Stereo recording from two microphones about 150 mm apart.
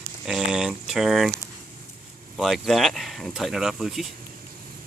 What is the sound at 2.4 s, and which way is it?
Speech, centre (ahead or behind).